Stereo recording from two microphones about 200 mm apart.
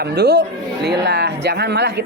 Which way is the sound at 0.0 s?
55° right (ahead or behind).